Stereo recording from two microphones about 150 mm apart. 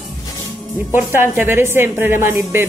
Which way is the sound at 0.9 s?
15° right (ahead or behind).